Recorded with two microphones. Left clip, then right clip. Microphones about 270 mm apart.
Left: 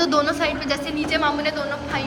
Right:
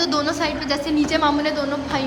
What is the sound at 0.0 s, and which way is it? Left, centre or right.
A woman's voice, centre.